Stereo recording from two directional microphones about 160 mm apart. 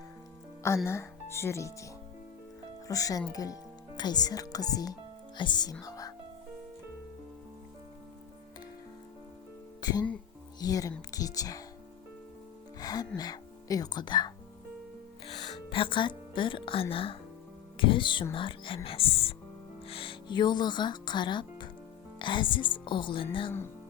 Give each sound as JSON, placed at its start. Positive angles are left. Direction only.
{"t": 0.9, "sound": "speech", "side_deg": 15}
{"t": 5.8, "sound": "music", "side_deg": 20}
{"t": 9.8, "sound": "speech", "side_deg": 25}
{"t": 12.8, "sound": "speech", "side_deg": 25}
{"t": 15.7, "sound": "speech", "side_deg": 30}